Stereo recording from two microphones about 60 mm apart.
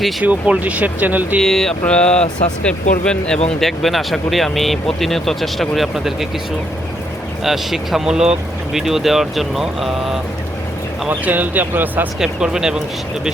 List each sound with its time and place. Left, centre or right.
0.2 s speech: right
1.4 s speech: centre
1.9 s speech: centre
3.6 s speech: centre
7.4 s speech: centre
11.1 s speech: right
12.2 s speech: centre